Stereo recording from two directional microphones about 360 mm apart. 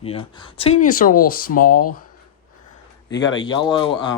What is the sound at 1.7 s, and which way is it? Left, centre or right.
Speech, left.